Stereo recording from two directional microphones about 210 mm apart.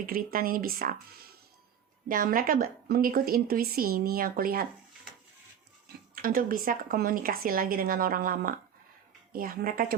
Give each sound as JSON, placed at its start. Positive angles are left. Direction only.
{"t": 0.0, "sound": "a woman's voice", "side_deg": -45}
{"t": 2.0, "sound": "a woman's voice", "side_deg": -40}
{"t": 6.2, "sound": "a woman's voice", "side_deg": -40}